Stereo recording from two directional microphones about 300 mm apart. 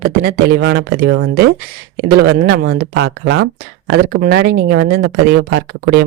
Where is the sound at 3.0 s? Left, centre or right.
Right.